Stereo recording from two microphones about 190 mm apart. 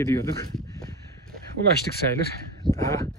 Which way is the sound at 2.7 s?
15° left (ahead or behind).